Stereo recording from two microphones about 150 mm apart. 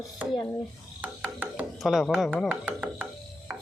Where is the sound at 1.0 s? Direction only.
10° right (ahead or behind).